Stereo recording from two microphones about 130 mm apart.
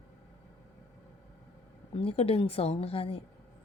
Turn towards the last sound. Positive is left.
turn(degrees=45)  # may be behind; listen again after turning